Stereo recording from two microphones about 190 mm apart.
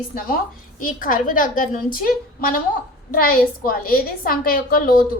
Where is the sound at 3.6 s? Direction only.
50° left (ahead or behind).